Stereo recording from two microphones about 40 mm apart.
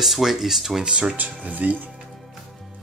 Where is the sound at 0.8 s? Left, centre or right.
Right.